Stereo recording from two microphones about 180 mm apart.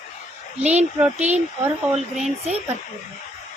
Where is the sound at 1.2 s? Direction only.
40° right (ahead or behind).